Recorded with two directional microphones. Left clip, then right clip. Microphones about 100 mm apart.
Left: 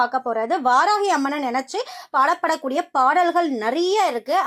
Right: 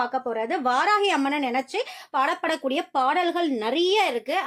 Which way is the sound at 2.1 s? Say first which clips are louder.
Left 5 dB; 25° right (ahead or behind).